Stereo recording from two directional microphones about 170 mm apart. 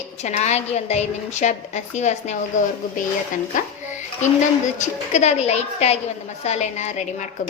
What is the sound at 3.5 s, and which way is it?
Dishes, 45° left (ahead or behind).